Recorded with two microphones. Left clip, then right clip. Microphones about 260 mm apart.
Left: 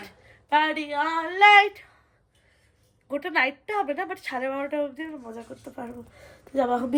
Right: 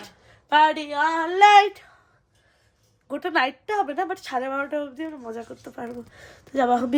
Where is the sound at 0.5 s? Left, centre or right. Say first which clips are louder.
Right 4 dB; centre.